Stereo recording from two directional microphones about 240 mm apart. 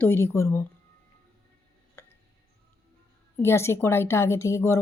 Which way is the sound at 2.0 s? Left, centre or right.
Centre.